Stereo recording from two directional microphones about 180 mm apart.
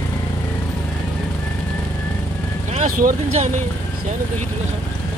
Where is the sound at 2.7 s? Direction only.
45° right (ahead or behind).